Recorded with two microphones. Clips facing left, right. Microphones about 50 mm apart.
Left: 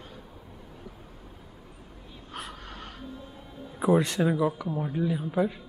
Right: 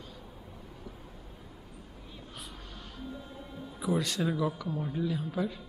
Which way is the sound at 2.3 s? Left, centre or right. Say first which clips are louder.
Left 10 dB; left.